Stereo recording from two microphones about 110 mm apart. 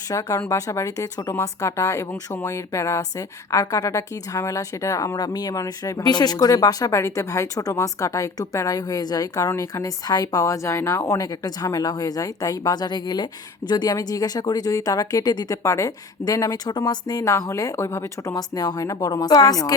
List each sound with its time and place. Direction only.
0.1 s speech: 30° left (ahead or behind)